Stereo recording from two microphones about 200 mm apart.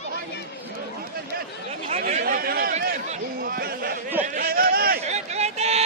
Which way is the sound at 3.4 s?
45° right (ahead or behind).